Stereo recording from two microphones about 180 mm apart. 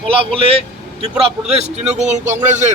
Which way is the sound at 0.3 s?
30° right (ahead or behind).